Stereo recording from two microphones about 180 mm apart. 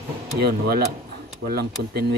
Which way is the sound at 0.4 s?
60° right (ahead or behind).